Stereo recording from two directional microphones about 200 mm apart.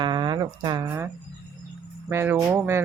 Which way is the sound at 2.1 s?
10° right (ahead or behind).